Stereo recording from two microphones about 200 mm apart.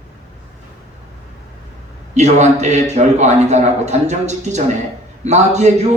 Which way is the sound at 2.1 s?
35° right (ahead or behind).